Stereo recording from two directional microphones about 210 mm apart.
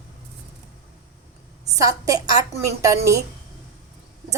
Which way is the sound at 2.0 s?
15° right (ahead or behind).